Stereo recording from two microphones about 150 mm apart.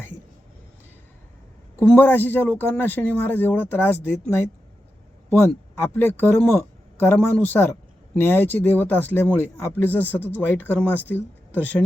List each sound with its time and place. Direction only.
1.8 s speech: 10° left (ahead or behind)